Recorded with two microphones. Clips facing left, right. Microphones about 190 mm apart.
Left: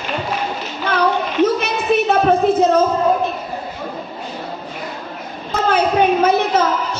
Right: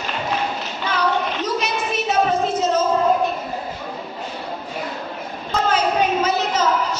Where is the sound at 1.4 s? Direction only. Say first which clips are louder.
Left 7 dB; 55° left (ahead or behind).